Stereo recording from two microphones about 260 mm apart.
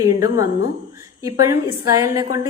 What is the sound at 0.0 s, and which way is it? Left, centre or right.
A woman's voice, centre.